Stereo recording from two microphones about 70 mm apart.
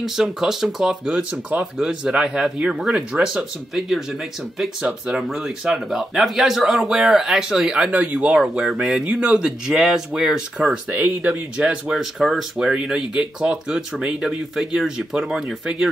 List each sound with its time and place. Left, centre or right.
0.0 s speech: centre
4.8 s speech: centre
10.9 s speech: right
11.5 s speech: centre
11.9 s speech: centre